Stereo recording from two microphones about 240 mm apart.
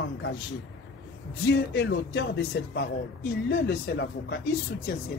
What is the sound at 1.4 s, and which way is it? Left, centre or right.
Speech, left.